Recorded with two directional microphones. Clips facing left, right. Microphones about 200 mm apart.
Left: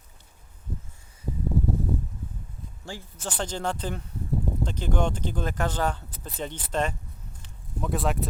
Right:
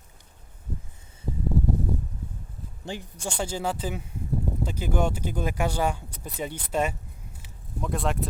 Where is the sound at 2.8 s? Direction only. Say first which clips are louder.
Right 3 dB; 20° right (ahead or behind).